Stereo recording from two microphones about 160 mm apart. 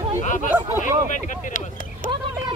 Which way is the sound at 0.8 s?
50° left (ahead or behind).